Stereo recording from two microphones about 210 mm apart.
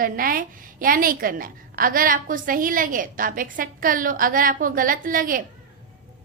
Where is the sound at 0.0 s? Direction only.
45° right (ahead or behind).